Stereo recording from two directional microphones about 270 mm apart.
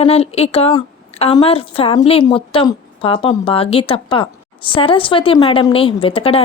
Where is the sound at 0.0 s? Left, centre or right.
Left.